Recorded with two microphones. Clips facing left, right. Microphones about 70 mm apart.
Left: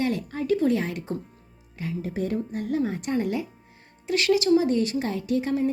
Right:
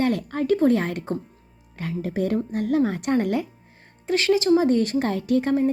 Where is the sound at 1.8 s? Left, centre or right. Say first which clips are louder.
Right 3 dB; right.